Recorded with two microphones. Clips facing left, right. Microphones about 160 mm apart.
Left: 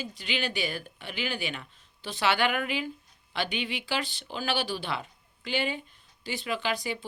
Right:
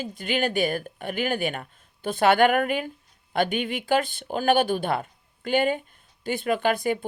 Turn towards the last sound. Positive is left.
turn(degrees=-55)  # may be behind; listen again after turning